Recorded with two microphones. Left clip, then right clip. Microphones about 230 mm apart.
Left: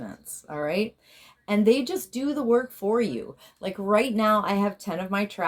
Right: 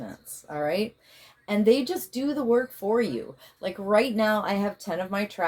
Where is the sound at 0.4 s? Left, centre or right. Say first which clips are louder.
Even; left.